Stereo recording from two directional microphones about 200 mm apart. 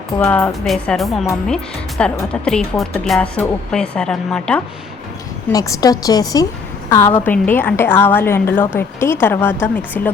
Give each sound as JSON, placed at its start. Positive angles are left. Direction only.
{"t": 0.2, "sound": "a woman's voice", "side_deg": 10}
{"t": 5.5, "sound": "a woman's voice", "side_deg": 20}